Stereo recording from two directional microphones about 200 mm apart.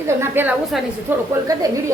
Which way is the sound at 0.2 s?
10° right (ahead or behind).